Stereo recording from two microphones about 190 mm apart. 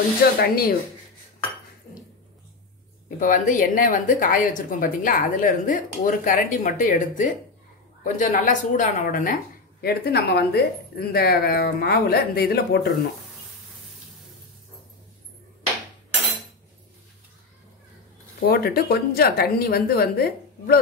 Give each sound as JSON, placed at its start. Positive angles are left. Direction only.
{"t": 0.4, "sound": "a woman's voice", "side_deg": 55}
{"t": 3.2, "sound": "a woman's voice", "side_deg": 45}
{"t": 18.4, "sound": "a woman's voice", "side_deg": 55}